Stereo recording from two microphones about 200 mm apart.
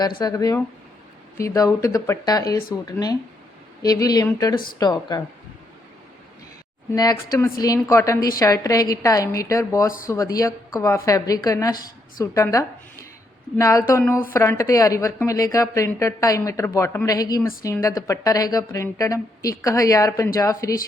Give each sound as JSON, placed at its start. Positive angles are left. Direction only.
{"t": 0.2, "sound": "a woman's voice", "side_deg": 20}
{"t": 6.9, "sound": "a woman's voice", "side_deg": 20}